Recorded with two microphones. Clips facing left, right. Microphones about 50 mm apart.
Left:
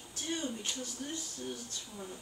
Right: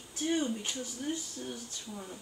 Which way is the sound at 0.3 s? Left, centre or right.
Centre.